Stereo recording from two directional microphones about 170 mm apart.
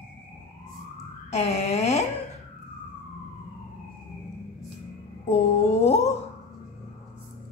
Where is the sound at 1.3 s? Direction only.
40° left (ahead or behind).